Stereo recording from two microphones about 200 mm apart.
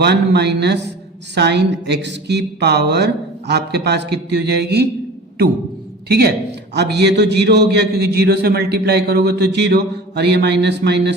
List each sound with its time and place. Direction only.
0.0 s a man's voice: 55° right (ahead or behind)
6.1 s a man's voice: 50° right (ahead or behind)